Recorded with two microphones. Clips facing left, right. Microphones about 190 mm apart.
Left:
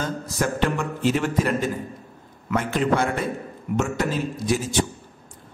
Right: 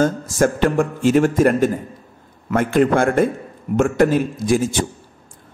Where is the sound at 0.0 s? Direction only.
45° right (ahead or behind).